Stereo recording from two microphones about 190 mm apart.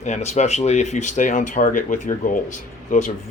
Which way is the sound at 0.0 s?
35° left (ahead or behind).